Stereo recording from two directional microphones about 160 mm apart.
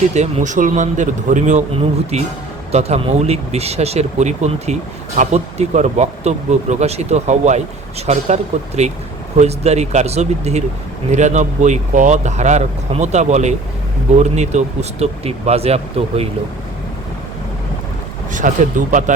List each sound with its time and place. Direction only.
0.1 s speech: 45° right (ahead or behind)
18.3 s speech: 55° right (ahead or behind)